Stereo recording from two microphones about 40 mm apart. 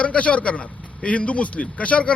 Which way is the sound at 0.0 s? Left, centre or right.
Left.